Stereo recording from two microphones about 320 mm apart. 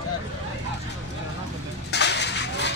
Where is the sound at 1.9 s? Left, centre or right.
Left.